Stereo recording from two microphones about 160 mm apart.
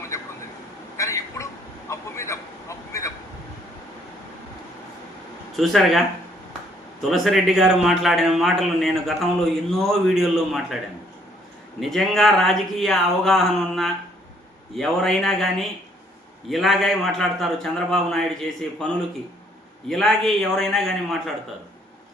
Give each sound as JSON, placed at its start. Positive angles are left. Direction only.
{"t": 0.1, "sound": "a sound", "side_deg": 20}
{"t": 5.5, "sound": "a man's voice", "side_deg": 0}
{"t": 7.0, "sound": "a man's voice", "side_deg": 0}
{"t": 11.8, "sound": "a man's voice", "side_deg": 0}
{"t": 19.9, "sound": "a man's voice", "side_deg": 0}